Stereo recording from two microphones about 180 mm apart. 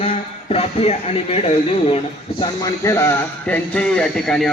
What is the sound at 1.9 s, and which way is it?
A man's voice, 25° left (ahead or behind).